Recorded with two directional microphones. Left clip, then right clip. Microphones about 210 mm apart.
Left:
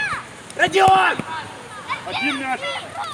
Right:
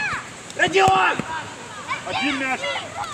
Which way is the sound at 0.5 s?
30° left (ahead or behind).